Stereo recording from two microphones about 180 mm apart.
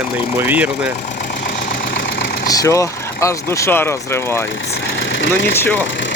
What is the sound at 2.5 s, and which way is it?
Speech, 20° left (ahead or behind).